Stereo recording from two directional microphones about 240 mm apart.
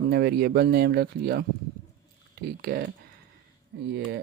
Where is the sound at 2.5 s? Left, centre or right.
Right.